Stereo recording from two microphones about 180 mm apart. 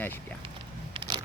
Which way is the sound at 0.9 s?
30° right (ahead or behind).